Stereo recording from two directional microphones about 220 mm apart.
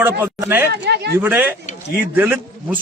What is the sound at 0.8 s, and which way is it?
Speech, 50° right (ahead or behind).